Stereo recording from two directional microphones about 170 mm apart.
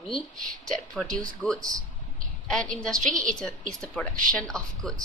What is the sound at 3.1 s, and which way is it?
Speech, 50° right (ahead or behind).